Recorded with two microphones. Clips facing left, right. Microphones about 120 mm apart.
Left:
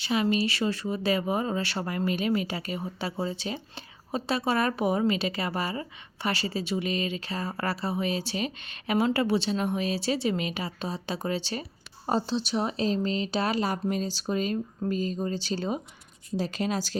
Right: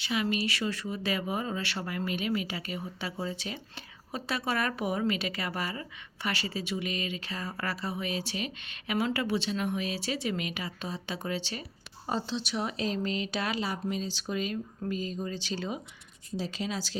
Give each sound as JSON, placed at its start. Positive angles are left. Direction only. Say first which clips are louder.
{"t": 0.0, "sound": "speech", "louder": "left 5 dB", "side_deg": 35}
{"t": 16.4, "sound": "speech", "louder": "left 5 dB", "side_deg": 50}